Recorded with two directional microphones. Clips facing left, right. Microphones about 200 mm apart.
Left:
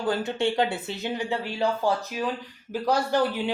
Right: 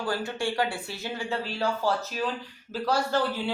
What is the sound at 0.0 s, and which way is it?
A man's voice, 20° left (ahead or behind).